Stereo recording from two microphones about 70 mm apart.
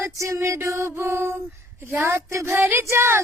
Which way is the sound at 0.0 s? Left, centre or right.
Right.